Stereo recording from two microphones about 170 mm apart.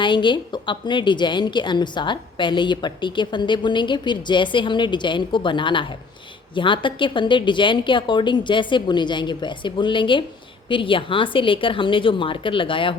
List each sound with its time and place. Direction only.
0.0 s a woman's voice: 30° left (ahead or behind)